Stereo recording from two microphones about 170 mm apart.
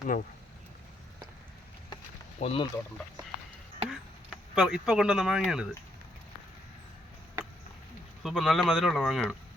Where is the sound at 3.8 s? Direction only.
5° right (ahead or behind).